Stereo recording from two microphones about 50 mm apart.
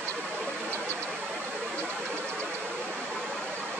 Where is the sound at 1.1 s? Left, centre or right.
Right.